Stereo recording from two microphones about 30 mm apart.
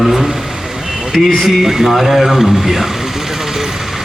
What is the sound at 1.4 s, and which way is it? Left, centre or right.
Speech, centre.